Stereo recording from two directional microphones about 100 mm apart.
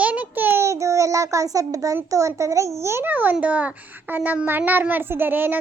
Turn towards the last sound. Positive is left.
turn(degrees=-20)  # may be behind; listen again after turning